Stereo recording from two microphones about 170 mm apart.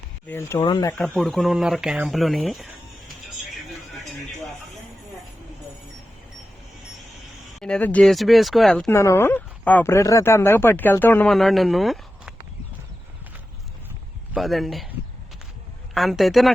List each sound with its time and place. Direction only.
0.3 s speech: 15° left (ahead or behind)
0.9 s speech: 5° left (ahead or behind)
7.6 s speech: 5° left (ahead or behind)
8.9 s speech: 15° left (ahead or behind); by 12.3 s centre (ahead or behind)
14.3 s speech: centre (ahead or behind)
16.0 s speech: centre (ahead or behind)